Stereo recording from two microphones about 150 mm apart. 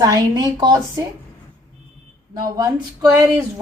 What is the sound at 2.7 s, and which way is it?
Speech, 10° right (ahead or behind).